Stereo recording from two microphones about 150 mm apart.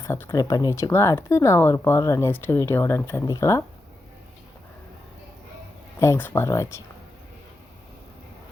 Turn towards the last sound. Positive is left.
turn(degrees=20)  # may be behind; listen again after turning